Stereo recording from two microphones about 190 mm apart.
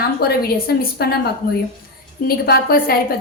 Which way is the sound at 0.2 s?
55° left (ahead or behind).